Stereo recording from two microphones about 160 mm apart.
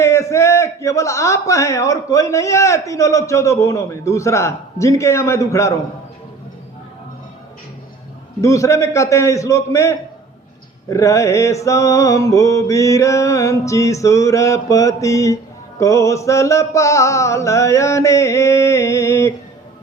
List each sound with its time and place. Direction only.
0.0 s a man's voice: 20° left (ahead or behind)
8.4 s a man's voice: 20° left (ahead or behind)